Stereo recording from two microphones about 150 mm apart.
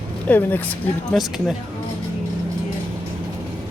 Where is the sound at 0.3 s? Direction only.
10° left (ahead or behind).